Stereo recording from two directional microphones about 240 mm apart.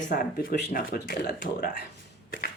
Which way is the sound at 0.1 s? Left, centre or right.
Left.